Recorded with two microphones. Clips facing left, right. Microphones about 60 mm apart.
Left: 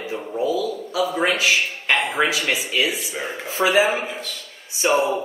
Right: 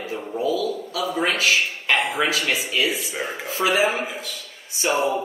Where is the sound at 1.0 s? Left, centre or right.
Centre.